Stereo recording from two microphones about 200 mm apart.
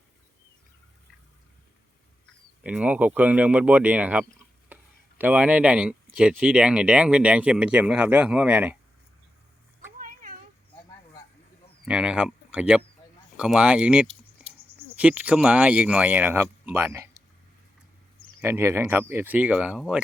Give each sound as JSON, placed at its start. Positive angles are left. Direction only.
{"t": 2.6, "sound": "speech", "side_deg": -5}
{"t": 4.7, "sound": "a sound", "side_deg": -10}
{"t": 6.1, "sound": "speech", "side_deg": -5}
{"t": 10.0, "sound": "a sound", "side_deg": -40}
{"t": 11.9, "sound": "speech", "side_deg": -5}
{"t": 18.3, "sound": "speech", "side_deg": -10}